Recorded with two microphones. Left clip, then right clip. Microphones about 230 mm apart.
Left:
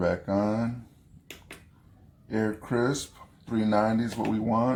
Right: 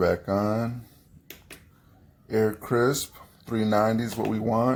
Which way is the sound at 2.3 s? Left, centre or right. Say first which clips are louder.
Right 5 dB; right.